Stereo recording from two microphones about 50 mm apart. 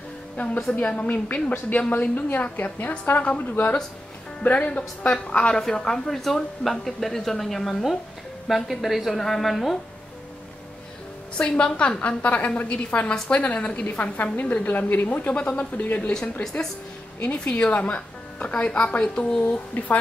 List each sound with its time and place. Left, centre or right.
0.7 s a woman's voice: left
5.6 s speech: centre
11.3 s a woman's voice: left
17.2 s a woman's voice: left